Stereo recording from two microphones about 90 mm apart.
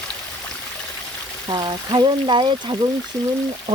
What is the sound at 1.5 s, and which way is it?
Speech, 55° right (ahead or behind).